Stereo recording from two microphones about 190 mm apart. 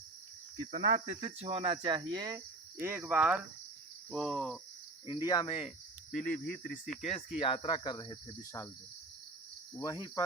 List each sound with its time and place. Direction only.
0.7 s cricket: 40° right (ahead or behind); by 3.4 s 5° right (ahead or behind)
4.1 s speech: centre (ahead or behind)
5.0 s speech: 20° left (ahead or behind)
6.1 s speech: 45° left (ahead or behind); by 8.4 s 30° left (ahead or behind)
9.7 s cricket: 15° left (ahead or behind)